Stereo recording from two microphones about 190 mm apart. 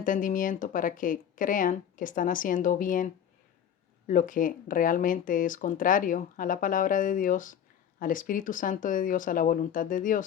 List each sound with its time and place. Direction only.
0.0 s speech: 45° left (ahead or behind)